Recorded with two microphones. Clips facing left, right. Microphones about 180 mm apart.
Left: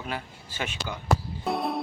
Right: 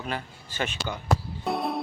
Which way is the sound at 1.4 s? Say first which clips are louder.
Even; centre (ahead or behind).